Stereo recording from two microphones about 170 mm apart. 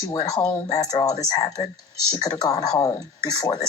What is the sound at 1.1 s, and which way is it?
Speech, 40° left (ahead or behind).